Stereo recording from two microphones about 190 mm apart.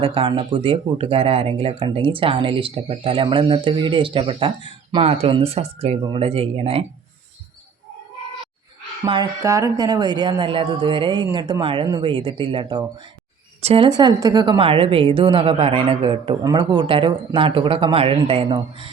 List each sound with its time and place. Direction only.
0.0 s speech: 30° right (ahead or behind)
9.0 s speech: 20° right (ahead or behind)